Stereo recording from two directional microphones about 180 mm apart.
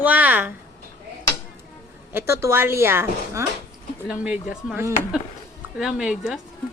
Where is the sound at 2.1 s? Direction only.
15° right (ahead or behind).